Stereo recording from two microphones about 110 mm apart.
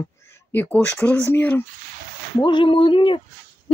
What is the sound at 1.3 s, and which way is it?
Speech, 15° left (ahead or behind).